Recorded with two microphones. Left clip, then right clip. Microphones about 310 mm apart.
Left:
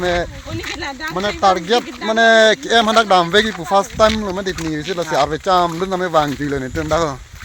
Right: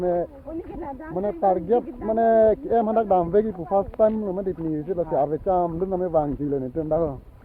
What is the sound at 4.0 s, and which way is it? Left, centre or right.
Speech, left.